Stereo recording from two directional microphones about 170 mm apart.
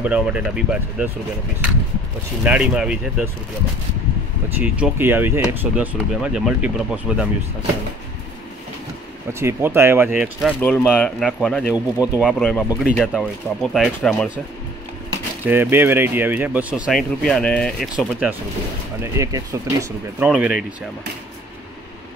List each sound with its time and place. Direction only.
0.0 s speech: 5° right (ahead or behind)
2.4 s speech: 5° right (ahead or behind)
4.6 s speech: 10° right (ahead or behind)
9.3 s speech: 15° right (ahead or behind)
10.6 s speech: 5° left (ahead or behind)
11.7 s speech: 10° right (ahead or behind)
15.4 s speech: 15° right (ahead or behind)
19.1 s speech: 20° right (ahead or behind)
20.2 s speech: 5° right (ahead or behind)